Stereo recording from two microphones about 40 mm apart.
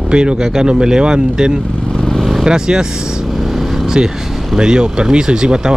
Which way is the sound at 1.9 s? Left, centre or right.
Centre.